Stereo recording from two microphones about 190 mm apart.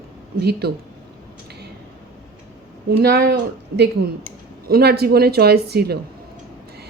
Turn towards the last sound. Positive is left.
turn(degrees=-55)  # may be behind; listen again after turning